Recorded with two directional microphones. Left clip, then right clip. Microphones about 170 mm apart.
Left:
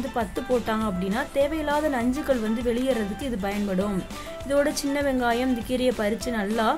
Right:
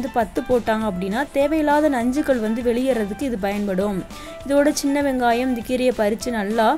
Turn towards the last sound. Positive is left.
turn(degrees=-20)  # may be behind; listen again after turning